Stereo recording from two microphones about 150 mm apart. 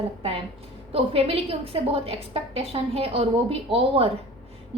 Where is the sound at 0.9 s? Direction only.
40° right (ahead or behind).